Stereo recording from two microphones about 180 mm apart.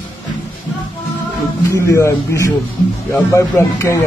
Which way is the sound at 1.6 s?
15° left (ahead or behind).